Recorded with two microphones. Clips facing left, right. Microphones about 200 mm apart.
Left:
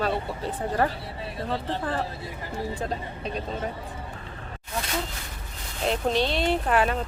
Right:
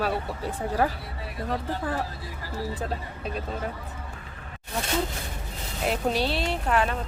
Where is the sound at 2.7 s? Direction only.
5° right (ahead or behind).